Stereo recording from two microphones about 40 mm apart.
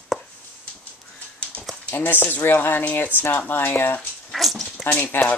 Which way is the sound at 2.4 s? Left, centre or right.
Left.